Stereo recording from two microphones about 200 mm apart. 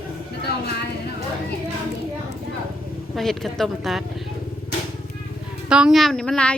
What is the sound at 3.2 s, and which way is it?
Speech, centre (ahead or behind).